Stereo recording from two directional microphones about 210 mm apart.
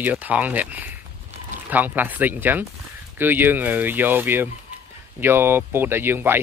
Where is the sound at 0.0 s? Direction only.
5° right (ahead or behind).